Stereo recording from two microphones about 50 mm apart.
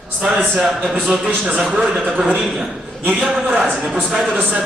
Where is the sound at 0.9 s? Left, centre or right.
Centre.